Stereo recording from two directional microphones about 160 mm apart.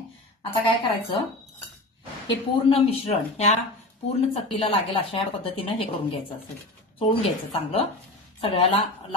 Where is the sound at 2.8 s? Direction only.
40° left (ahead or behind).